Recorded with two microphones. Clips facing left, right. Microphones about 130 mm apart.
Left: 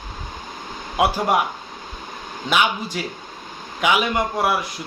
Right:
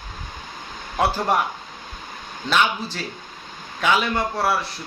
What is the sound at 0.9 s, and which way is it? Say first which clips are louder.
Speech: left 2 dB; 10° left (ahead or behind).